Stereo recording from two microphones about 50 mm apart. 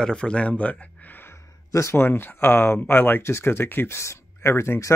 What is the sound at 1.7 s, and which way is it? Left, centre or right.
Speech, left.